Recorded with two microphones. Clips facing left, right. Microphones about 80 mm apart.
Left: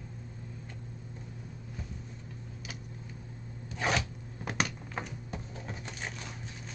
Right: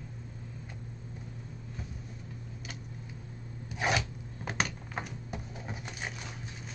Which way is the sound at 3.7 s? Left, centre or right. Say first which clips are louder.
Even; centre.